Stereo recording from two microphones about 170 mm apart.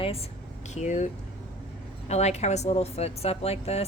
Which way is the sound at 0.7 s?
45° left (ahead or behind).